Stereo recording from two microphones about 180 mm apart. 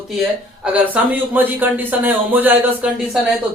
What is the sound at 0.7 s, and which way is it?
Speech, 10° right (ahead or behind).